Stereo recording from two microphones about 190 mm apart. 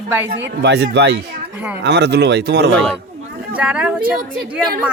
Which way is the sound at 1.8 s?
60° right (ahead or behind).